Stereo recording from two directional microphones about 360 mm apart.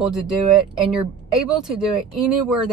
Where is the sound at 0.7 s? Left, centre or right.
Centre.